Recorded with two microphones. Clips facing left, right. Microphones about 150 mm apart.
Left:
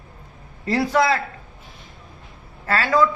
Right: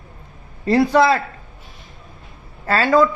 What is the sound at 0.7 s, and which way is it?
Speech, 30° right (ahead or behind).